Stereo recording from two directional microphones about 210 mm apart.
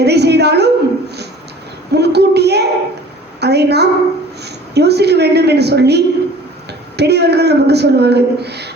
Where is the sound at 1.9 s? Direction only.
50° right (ahead or behind).